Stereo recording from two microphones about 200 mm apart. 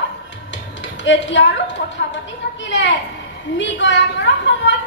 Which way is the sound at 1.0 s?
65° left (ahead or behind).